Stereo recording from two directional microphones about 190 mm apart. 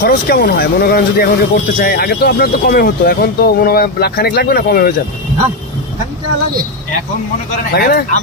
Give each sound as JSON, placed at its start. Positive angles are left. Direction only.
{"t": 0.0, "sound": "speech", "side_deg": 50}
{"t": 7.7, "sound": "speech", "side_deg": 55}